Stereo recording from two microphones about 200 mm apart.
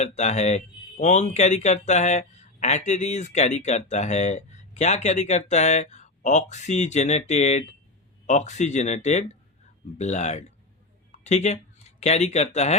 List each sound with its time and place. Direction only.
0.0 s speech: 35° left (ahead or behind)